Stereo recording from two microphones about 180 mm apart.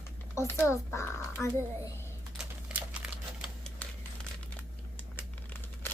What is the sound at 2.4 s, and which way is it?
Typing, 5° right (ahead or behind).